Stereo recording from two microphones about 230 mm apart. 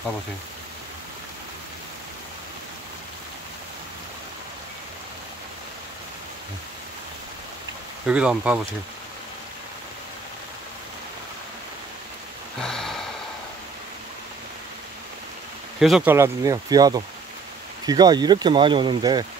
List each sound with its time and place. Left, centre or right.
8.1 s speech: centre
12.5 s a sound: centre
15.8 s speech: centre